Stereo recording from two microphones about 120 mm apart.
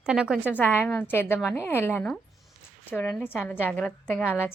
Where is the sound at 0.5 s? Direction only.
15° left (ahead or behind).